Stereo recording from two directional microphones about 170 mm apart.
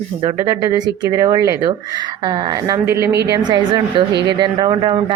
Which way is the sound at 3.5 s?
25° right (ahead or behind).